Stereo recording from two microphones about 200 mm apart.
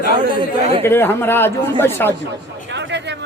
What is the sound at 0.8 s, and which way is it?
Speech, 10° left (ahead or behind).